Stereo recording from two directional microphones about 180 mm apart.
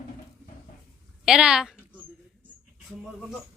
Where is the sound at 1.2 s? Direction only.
5° right (ahead or behind).